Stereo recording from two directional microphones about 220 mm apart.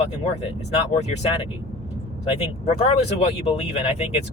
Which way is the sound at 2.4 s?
30° left (ahead or behind).